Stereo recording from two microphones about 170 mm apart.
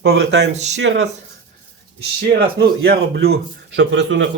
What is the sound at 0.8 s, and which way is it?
Speech, 90° right.